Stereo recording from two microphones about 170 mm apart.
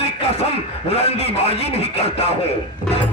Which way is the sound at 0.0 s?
40° left (ahead or behind).